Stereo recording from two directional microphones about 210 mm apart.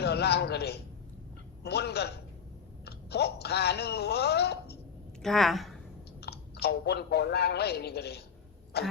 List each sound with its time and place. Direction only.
0.0 s a man's voice: 50° left (ahead or behind)
5.2 s a woman's voice: centre (ahead or behind)
6.1 s speech: 50° left (ahead or behind)